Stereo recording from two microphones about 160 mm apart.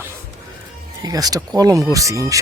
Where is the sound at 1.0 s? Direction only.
25° right (ahead or behind).